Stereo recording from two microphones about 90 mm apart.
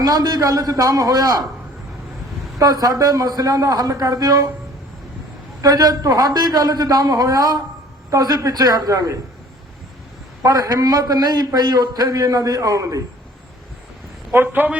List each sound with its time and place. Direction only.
0.0 s a man's voice: 45° right (ahead or behind)
2.6 s a man's voice: 45° right (ahead or behind)
5.6 s a man's voice: 40° right (ahead or behind)
10.4 s a man's voice: 45° right (ahead or behind)
14.3 s speech: 20° right (ahead or behind)